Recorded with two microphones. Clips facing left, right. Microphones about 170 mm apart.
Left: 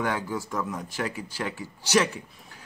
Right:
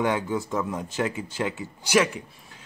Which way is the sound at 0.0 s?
20° right (ahead or behind).